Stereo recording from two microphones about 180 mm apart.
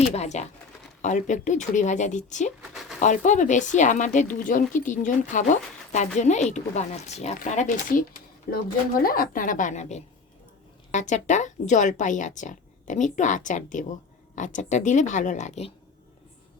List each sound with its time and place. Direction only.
0.0 s speech: 40° left (ahead or behind)
2.6 s a sound: 5° right (ahead or behind)
3.0 s speech: 45° left (ahead or behind)